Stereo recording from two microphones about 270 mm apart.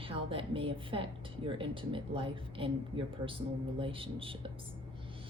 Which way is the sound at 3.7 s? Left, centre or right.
Centre.